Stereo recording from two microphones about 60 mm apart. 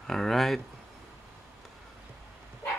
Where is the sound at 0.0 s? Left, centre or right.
Centre.